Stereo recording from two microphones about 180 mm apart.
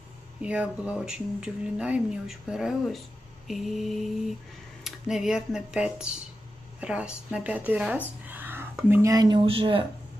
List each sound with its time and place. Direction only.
0.4 s speech: 5° right (ahead or behind); by 9.8 s 30° right (ahead or behind)